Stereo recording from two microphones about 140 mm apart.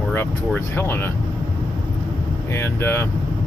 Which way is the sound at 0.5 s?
15° left (ahead or behind).